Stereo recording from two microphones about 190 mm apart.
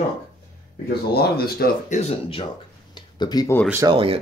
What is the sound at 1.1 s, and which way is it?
Speech, 55° left (ahead or behind).